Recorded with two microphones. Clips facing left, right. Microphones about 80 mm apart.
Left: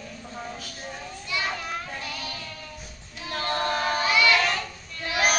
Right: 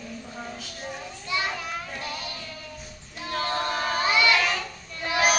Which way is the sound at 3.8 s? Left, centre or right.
Centre.